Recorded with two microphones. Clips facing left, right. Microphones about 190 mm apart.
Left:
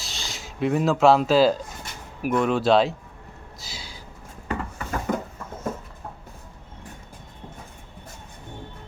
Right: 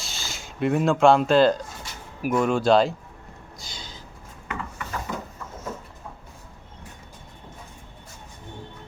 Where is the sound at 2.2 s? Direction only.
Centre (ahead or behind).